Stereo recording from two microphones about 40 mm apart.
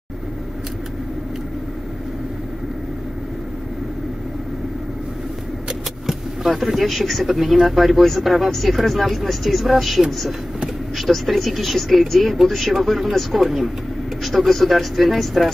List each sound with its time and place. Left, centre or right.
6.0 s speech: centre
11.2 s speech: centre
14.2 s speech: centre